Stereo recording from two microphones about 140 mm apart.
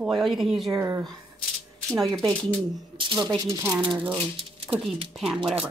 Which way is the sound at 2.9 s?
35° right (ahead or behind).